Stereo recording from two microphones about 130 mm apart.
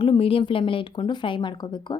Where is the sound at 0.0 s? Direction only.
45° left (ahead or behind).